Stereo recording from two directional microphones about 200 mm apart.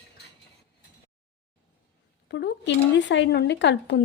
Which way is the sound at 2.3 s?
60° left (ahead or behind).